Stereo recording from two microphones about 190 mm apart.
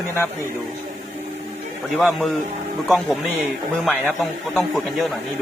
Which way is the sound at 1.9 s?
Centre (ahead or behind).